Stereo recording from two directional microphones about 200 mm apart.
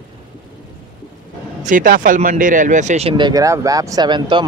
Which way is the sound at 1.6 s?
40° right (ahead or behind).